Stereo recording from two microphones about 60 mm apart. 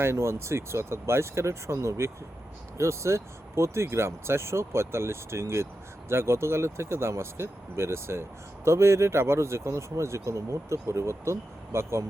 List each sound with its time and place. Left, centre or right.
0.0 s speech: right